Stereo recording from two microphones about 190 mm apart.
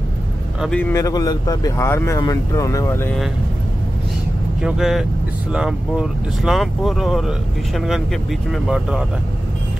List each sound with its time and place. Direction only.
0.6 s speech: 5° left (ahead or behind)
4.6 s speech: 5° right (ahead or behind)